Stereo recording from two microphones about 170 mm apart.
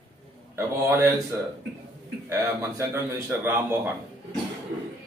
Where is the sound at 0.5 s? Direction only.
15° right (ahead or behind).